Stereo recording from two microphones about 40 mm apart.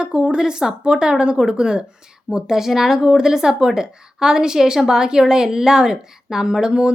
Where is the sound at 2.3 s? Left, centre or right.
Centre.